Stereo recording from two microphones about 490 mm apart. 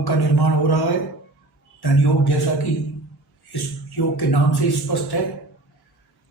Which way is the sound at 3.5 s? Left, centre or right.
Left.